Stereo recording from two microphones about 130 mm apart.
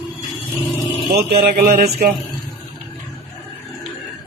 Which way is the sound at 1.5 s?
90° right.